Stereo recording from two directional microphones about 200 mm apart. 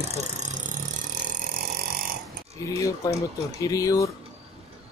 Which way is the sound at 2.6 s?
15° left (ahead or behind).